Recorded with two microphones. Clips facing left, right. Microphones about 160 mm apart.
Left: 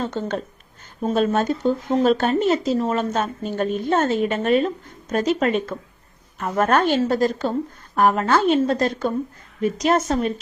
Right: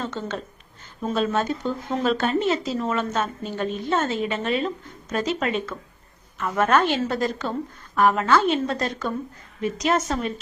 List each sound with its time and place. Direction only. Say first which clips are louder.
0.0 s a woman's voice: left 4 dB; 45° left (ahead or behind)